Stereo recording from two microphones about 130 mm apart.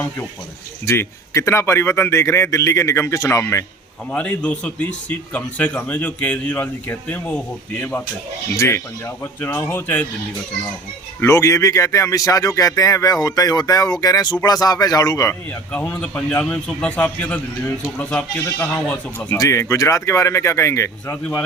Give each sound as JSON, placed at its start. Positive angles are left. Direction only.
{"t": 0.9, "sound": "speech", "side_deg": 25}
{"t": 4.1, "sound": "speech", "side_deg": 10}
{"t": 11.2, "sound": "speech", "side_deg": 25}
{"t": 15.7, "sound": "speech", "side_deg": 10}
{"t": 19.4, "sound": "speech", "side_deg": 25}